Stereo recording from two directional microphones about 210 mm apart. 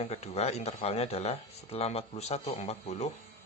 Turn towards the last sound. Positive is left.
turn(degrees=30)  # may be behind; listen again after turning